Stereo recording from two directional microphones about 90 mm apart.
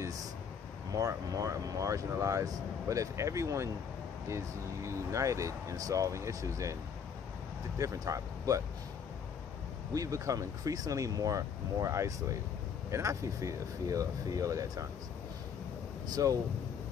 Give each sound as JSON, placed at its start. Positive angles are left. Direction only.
{"t": 0.0, "sound": "speech", "side_deg": -40}
{"t": 4.8, "sound": "speech", "side_deg": -35}
{"t": 9.9, "sound": "speech", "side_deg": -35}
{"t": 16.2, "sound": "speech", "side_deg": -40}